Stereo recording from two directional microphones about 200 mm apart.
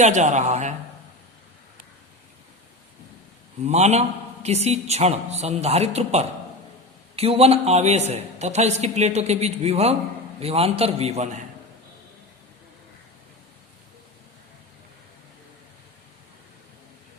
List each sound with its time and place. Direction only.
0.0 s a man's voice: 35° right (ahead or behind)
3.7 s a man's voice: 35° right (ahead or behind)